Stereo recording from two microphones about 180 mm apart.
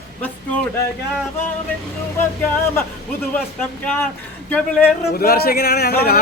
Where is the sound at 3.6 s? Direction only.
5° left (ahead or behind).